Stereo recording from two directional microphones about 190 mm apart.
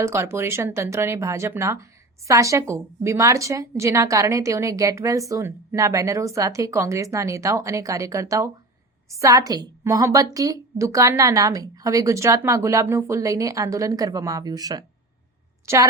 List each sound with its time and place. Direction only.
0.0 s a woman's voice: 15° right (ahead or behind)